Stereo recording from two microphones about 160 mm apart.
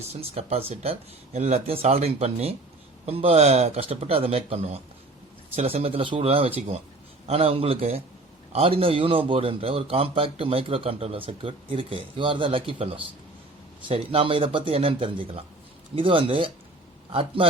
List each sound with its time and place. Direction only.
0.1 s a man's voice: 40° right (ahead or behind)